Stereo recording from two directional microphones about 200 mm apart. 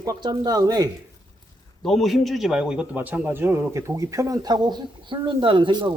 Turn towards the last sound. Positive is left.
turn(degrees=-25)  # may be behind; listen again after turning